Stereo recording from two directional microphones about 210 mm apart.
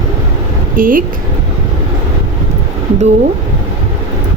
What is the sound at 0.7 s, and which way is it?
Speech, 40° right (ahead or behind).